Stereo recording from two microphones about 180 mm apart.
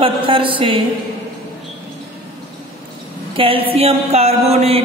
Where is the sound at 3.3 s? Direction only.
30° right (ahead or behind).